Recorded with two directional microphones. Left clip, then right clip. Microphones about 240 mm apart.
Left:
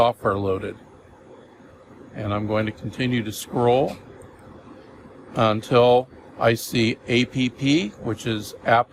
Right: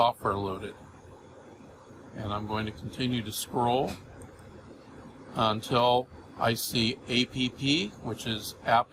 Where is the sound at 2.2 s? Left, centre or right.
Left.